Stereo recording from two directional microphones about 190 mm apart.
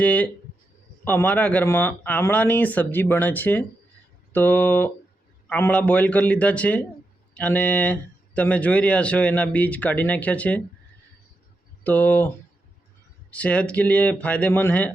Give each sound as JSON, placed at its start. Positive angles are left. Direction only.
{"t": 0.0, "sound": "speech", "side_deg": 5}
{"t": 11.8, "sound": "speech", "side_deg": 10}
{"t": 13.3, "sound": "speech", "side_deg": 5}